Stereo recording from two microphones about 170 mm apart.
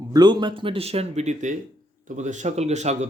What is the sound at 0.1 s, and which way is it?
Speech, 25° right (ahead or behind).